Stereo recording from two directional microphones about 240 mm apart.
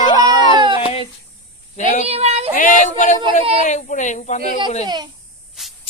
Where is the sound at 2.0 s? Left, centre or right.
Right.